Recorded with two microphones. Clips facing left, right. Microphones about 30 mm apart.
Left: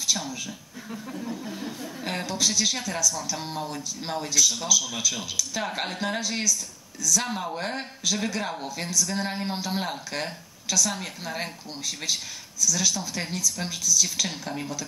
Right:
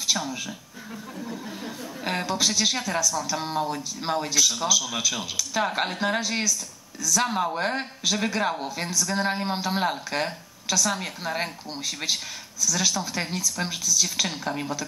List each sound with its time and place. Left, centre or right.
0.2 s speech: right
1.2 s a woman's voice: centre